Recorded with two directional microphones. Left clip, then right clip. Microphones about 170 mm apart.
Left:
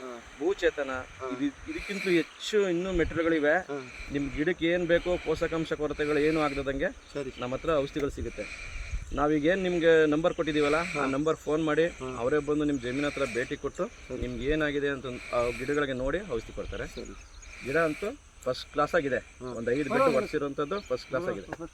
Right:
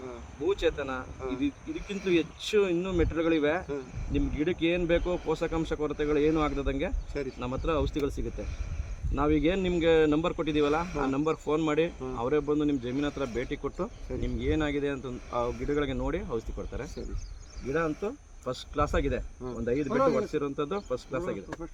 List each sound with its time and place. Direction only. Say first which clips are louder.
0.4 s speech: left 1 dB; 40° right (ahead or behind)
13.5 s speech: left 1 dB; 45° right (ahead or behind)